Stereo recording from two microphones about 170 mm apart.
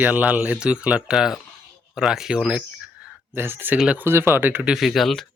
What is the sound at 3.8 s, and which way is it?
Speech, 10° right (ahead or behind).